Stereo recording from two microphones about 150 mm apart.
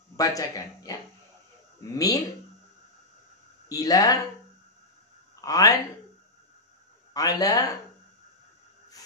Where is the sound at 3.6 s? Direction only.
25° left (ahead or behind).